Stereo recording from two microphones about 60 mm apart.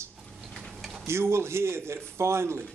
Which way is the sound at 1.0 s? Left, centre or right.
Right.